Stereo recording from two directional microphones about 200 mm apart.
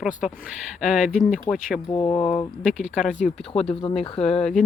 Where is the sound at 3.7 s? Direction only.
25° left (ahead or behind).